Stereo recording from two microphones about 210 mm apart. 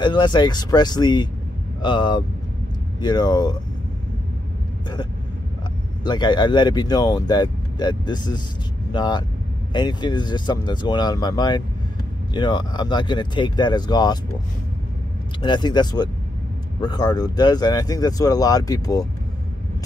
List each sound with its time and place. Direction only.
0.0 s speech: 20° left (ahead or behind)
6.0 s speech: 20° left (ahead or behind)
15.4 s speech: 20° left (ahead or behind)